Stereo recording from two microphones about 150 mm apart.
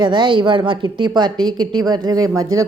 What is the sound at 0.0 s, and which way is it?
A woman's voice, 30° right (ahead or behind).